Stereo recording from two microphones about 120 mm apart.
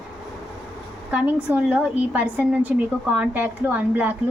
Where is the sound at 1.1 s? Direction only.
10° right (ahead or behind).